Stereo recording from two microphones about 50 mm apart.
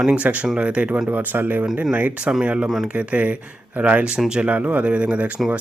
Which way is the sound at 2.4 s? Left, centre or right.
Right.